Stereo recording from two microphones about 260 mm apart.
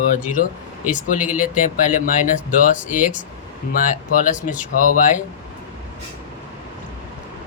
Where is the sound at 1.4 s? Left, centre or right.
Left.